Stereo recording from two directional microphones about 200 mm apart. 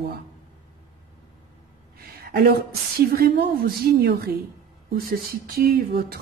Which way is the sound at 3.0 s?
50° right (ahead or behind).